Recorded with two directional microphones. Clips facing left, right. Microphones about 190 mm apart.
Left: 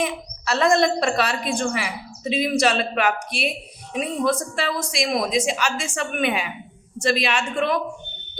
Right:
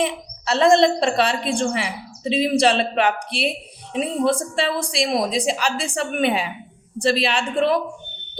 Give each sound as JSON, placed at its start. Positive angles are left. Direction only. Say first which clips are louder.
{"t": 0.0, "sound": "a woman's voice", "louder": "right 2 dB", "side_deg": -25}